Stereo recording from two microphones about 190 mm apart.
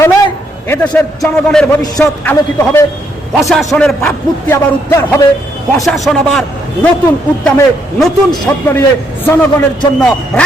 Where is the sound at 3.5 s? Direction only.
Centre (ahead or behind).